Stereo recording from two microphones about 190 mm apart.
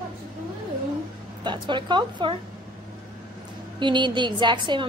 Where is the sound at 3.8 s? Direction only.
25° right (ahead or behind).